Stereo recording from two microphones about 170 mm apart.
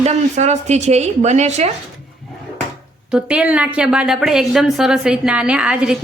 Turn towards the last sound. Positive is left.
turn(degrees=-5)  # may be behind; listen again after turning